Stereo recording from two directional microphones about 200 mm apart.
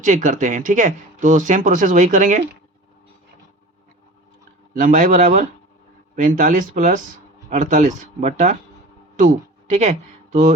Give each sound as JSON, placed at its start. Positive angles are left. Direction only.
{"t": 0.0, "sound": "speech", "side_deg": -40}
{"t": 4.8, "sound": "speech", "side_deg": -40}